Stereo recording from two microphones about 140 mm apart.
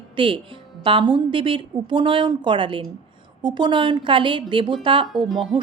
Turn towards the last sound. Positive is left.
turn(degrees=-35)  # may be behind; listen again after turning